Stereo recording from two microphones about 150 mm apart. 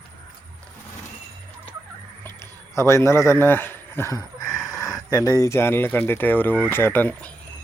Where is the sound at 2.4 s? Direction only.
20° left (ahead or behind).